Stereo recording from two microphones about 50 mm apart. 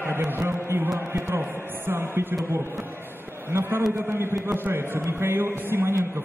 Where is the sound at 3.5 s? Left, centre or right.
Right.